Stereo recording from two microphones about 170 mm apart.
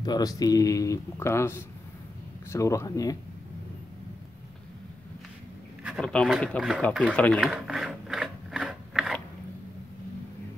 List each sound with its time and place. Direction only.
0.0 s speech: 25° left (ahead or behind)
5.9 s speech: 5° left (ahead or behind)
7.2 s a sound: 5° left (ahead or behind)